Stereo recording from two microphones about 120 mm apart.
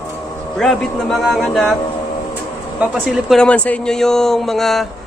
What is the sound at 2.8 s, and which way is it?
Speech, 5° right (ahead or behind).